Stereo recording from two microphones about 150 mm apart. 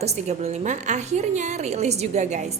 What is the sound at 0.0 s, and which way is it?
A woman's voice, 45° right (ahead or behind).